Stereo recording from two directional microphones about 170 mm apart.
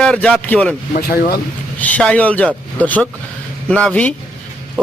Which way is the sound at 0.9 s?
55° left (ahead or behind).